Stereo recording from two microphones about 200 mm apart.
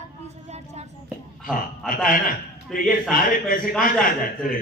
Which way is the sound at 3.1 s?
45° left (ahead or behind).